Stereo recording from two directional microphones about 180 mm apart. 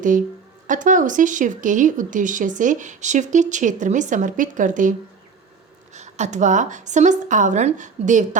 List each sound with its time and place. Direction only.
0.7 s speech: 45° right (ahead or behind)